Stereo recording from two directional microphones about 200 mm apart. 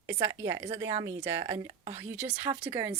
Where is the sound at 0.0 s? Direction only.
15° right (ahead or behind).